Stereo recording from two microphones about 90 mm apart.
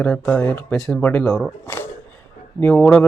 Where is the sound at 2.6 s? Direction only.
15° left (ahead or behind).